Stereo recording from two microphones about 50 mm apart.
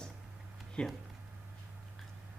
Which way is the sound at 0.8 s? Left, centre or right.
Left.